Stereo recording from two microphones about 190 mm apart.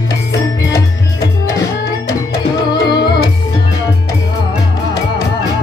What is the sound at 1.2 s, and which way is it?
Music, 15° left (ahead or behind).